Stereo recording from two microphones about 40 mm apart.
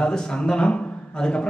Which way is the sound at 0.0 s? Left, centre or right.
Left.